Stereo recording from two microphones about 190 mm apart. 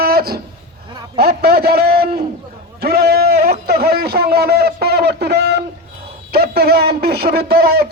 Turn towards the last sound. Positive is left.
turn(degrees=-55)  # may be behind; listen again after turning